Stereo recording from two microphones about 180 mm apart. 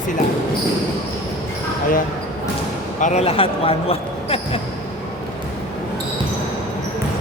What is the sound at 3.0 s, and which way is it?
Speech, 40° left (ahead or behind).